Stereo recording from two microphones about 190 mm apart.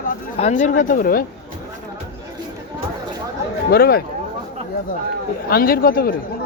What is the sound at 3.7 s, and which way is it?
Speech, 55° left (ahead or behind).